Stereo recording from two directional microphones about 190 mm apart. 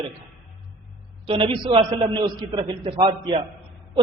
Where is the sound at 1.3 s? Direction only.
25° right (ahead or behind).